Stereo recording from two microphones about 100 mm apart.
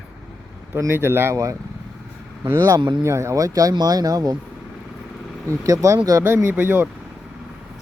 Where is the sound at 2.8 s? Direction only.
50° right (ahead or behind).